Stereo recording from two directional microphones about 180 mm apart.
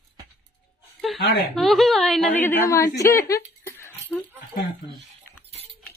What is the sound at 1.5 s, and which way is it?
Speech, centre (ahead or behind).